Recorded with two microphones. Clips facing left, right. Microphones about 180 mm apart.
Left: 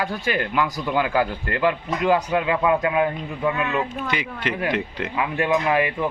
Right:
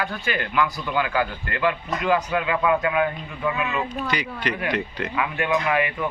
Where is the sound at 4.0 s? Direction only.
20° left (ahead or behind).